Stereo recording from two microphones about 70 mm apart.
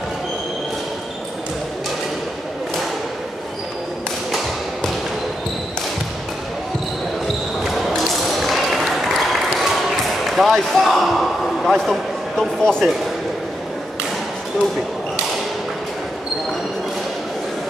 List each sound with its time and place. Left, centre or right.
7.6 s music: centre
10.2 s slam: centre